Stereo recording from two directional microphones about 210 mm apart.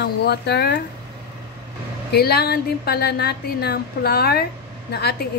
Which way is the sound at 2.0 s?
50° left (ahead or behind).